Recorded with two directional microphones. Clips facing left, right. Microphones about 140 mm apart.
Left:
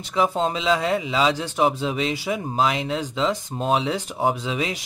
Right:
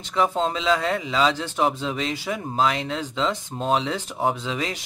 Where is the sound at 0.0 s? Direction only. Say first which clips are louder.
Left 1 dB; 10° left (ahead or behind).